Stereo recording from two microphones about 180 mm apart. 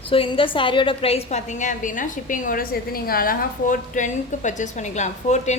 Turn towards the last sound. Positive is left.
turn(degrees=40)  # may be behind; listen again after turning